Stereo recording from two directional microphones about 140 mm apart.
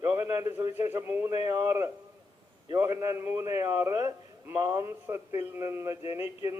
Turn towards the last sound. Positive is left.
turn(degrees=-20)  # may be behind; listen again after turning